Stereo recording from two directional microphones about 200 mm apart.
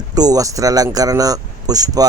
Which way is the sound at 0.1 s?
20° right (ahead or behind).